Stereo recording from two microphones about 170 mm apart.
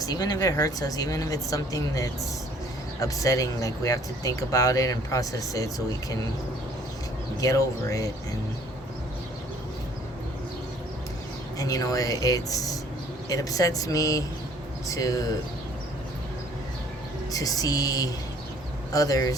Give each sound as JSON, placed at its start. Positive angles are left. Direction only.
{"t": 0.0, "sound": "speech", "side_deg": 20}
{"t": 7.4, "sound": "speech", "side_deg": 20}
{"t": 11.5, "sound": "speech", "side_deg": 20}
{"t": 17.3, "sound": "speech", "side_deg": 20}